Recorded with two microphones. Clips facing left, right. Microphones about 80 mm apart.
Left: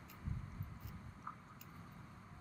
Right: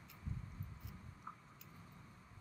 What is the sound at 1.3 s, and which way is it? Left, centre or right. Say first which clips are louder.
Chewing: left 3 dB; left.